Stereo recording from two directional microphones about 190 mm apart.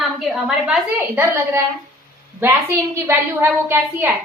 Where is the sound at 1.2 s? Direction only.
15° right (ahead or behind).